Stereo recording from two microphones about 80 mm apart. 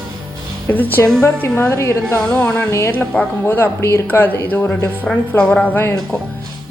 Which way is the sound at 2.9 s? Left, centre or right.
Centre.